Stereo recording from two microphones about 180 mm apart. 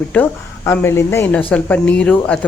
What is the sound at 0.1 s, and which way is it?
A woman's voice, 10° left (ahead or behind).